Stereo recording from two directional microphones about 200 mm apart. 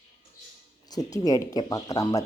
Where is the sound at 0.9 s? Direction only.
15° left (ahead or behind).